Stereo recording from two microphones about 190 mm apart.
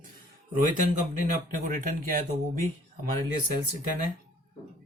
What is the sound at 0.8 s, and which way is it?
Speech, 45° left (ahead or behind).